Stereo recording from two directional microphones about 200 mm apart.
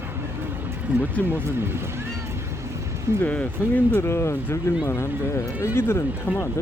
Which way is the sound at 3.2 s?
10° left (ahead or behind).